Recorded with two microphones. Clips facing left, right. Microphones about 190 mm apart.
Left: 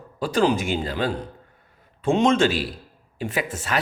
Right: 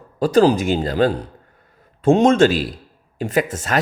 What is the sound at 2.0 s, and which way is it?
A man's voice, 40° right (ahead or behind).